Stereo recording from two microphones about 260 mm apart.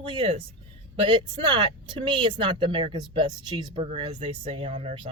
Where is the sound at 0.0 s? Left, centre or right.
Centre.